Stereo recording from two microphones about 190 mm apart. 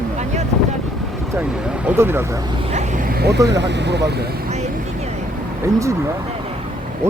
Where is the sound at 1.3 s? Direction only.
5° right (ahead or behind).